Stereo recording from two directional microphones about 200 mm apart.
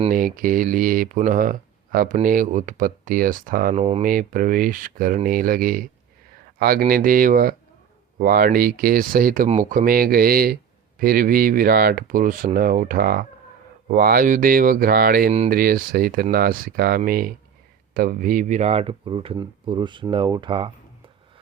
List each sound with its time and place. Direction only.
0.1 s speech: 45° right (ahead or behind)
4.0 s speech: 45° right (ahead or behind); by 20.7 s 25° right (ahead or behind)